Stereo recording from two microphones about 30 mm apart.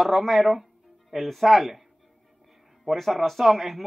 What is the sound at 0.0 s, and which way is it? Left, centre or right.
A man's voice, centre.